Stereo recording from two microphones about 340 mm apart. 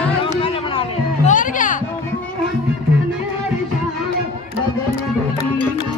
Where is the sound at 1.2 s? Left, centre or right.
Left.